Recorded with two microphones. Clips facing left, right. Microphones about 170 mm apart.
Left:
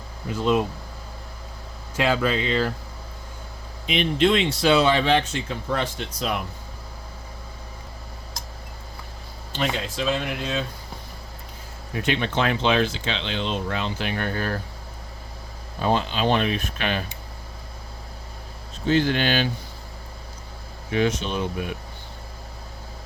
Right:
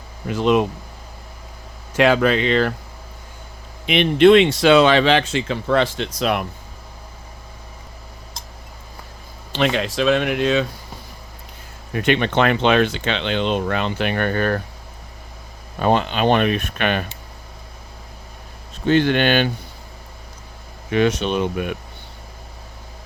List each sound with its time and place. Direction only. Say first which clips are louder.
0.3 s speech: right 5 dB; 75° right (ahead or behind)
2.0 s speech: right 6 dB; 70° right (ahead or behind)
3.8 s speech: right 8 dB; 70° right (ahead or behind)
9.5 s speech: right 7 dB; 80° right
11.9 s speech: right 6 dB; 65° right (ahead or behind)
15.8 s speech: right 5 dB; 65° right (ahead or behind)
18.9 s speech: right 5 dB; 65° right (ahead or behind)
20.9 s speech: right 5 dB; 70° right (ahead or behind)